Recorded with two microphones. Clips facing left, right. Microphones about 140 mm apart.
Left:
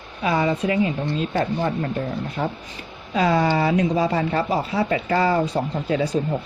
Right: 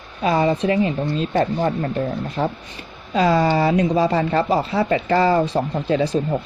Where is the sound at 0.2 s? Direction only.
35° right (ahead or behind).